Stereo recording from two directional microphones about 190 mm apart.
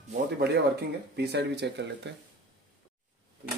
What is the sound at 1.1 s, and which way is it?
Speech, 60° right (ahead or behind).